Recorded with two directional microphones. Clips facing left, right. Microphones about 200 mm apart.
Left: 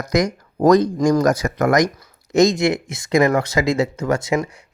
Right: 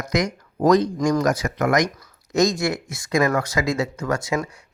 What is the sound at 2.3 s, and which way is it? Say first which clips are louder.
Speech: left 5 dB; 25° left (ahead or behind).